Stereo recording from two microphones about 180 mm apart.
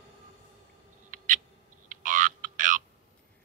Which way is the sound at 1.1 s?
45° right (ahead or behind).